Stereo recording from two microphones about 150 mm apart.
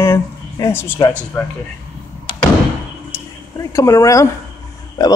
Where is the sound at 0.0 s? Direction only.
15° left (ahead or behind).